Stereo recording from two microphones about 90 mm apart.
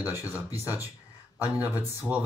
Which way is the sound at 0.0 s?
25° right (ahead or behind).